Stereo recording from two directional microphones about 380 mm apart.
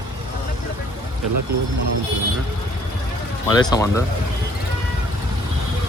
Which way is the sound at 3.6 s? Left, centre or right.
Centre.